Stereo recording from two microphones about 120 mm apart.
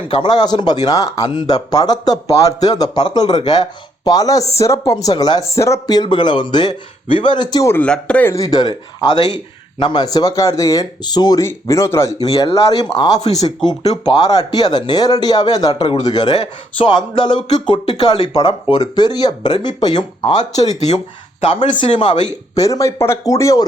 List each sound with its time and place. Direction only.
0.1 s speech: 35° left (ahead or behind)
7.7 s speech: 10° left (ahead or behind)
8.3 s speech: 30° left (ahead or behind)
11.4 s a man's voice: 25° left (ahead or behind)
20.3 s speech: 75° left (ahead or behind)
21.4 s speech: 45° left (ahead or behind)
22.5 s a man's voice: 30° left (ahead or behind)